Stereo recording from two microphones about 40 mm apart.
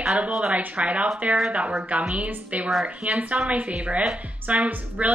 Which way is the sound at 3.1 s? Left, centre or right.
Right.